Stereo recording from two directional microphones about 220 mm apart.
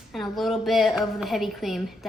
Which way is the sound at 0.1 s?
Centre (ahead or behind).